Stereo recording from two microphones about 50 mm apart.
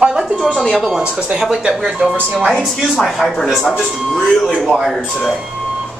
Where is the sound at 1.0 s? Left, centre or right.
Centre.